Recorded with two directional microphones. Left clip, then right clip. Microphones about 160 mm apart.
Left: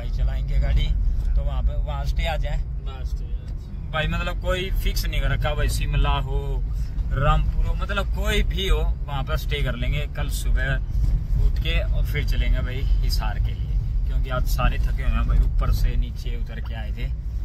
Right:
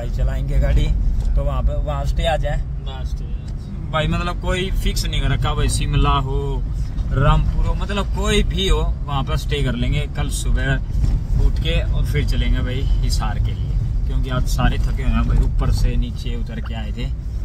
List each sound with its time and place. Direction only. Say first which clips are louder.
0.2 s speech: right 8 dB; 50° right (ahead or behind)
3.9 s speech: right 5 dB; 20° right (ahead or behind)
4.2 s speech: right 3 dB; 5° right (ahead or behind)